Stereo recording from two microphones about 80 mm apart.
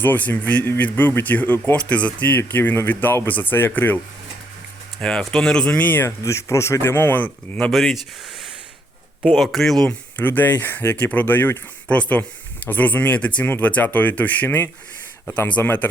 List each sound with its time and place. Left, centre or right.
0.0 s speech: left
4.9 s speech: centre; by 6.1 s left
6.2 s speech: left
7.2 s speech: centre
7.7 s speech: centre
10.2 s speech: left